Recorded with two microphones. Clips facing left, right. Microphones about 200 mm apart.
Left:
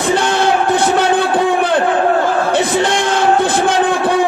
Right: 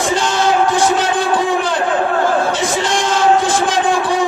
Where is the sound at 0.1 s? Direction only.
60° left (ahead or behind).